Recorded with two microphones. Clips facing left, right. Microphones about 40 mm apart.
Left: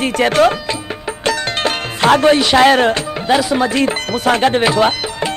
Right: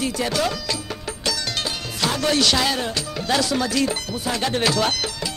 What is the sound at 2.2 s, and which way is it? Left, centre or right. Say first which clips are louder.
Music: left 8 dB; left.